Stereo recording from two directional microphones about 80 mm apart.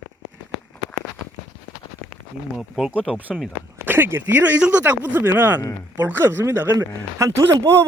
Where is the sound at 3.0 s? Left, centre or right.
Centre.